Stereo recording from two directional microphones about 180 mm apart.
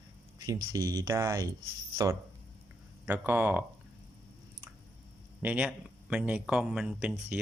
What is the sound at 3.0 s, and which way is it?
Speech, 10° right (ahead or behind).